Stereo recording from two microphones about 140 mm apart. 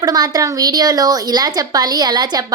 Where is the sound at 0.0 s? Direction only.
30° right (ahead or behind).